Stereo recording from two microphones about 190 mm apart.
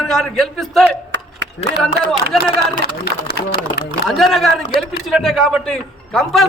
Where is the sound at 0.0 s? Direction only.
Centre (ahead or behind).